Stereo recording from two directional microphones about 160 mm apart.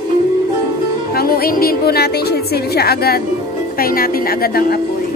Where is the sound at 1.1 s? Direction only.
70° left (ahead or behind).